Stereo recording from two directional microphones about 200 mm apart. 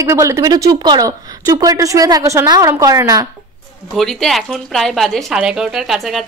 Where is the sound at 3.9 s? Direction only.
Centre (ahead or behind).